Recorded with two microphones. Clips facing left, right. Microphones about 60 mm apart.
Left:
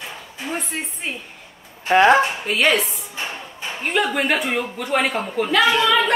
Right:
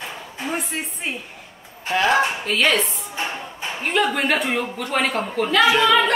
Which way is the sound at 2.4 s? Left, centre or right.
Centre.